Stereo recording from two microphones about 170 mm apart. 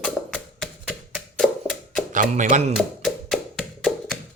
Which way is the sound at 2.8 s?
Centre (ahead or behind).